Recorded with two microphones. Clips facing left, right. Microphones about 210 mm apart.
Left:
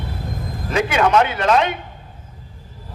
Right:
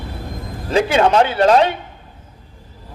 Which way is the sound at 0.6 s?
30° right (ahead or behind).